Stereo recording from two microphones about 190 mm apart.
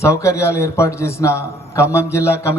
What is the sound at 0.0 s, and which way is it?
A man's voice, 15° left (ahead or behind).